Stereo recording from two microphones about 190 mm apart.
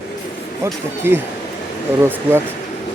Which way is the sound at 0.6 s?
10° right (ahead or behind).